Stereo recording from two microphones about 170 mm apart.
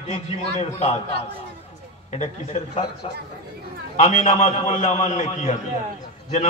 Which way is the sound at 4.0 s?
40° left (ahead or behind).